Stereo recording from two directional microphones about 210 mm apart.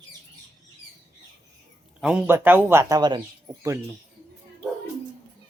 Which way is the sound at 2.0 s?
5° right (ahead or behind).